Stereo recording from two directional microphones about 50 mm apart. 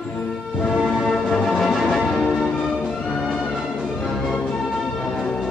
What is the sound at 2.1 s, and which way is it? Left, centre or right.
Change ringing, centre.